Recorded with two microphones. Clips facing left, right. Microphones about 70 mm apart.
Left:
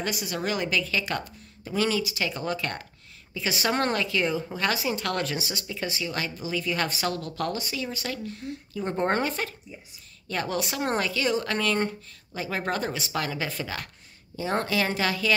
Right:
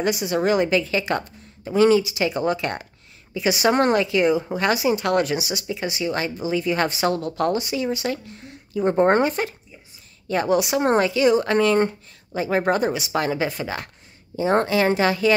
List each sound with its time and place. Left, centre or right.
0.0 s speech: right